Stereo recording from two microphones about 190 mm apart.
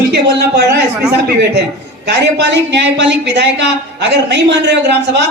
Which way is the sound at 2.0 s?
65° right (ahead or behind).